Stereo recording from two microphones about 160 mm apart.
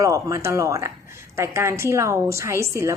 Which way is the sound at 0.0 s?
20° right (ahead or behind).